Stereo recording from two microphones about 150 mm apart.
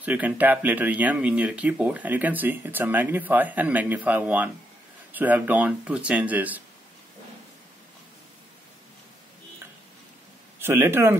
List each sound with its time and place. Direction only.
0.0 s speech: 10° right (ahead or behind)
10.6 s speech: 15° right (ahead or behind)